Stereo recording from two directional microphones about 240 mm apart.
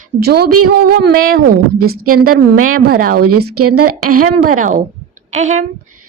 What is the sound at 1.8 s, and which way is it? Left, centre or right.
Speech, right.